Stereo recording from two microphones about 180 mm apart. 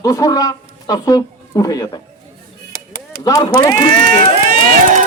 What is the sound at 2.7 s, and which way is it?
Chop, 50° left (ahead or behind).